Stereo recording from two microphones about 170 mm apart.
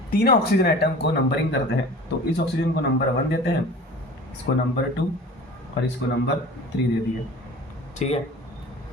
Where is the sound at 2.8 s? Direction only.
75° left (ahead or behind).